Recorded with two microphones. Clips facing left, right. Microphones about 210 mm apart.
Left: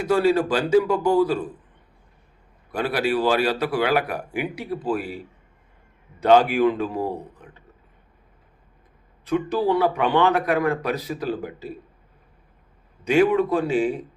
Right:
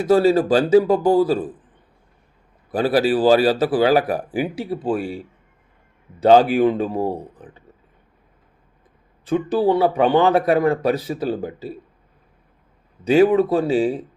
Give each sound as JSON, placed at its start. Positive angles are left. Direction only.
{"t": 0.1, "sound": "speech", "side_deg": -40}
{"t": 2.7, "sound": "speech", "side_deg": -35}
{"t": 9.2, "sound": "speech", "side_deg": -30}
{"t": 13.1, "sound": "speech", "side_deg": -35}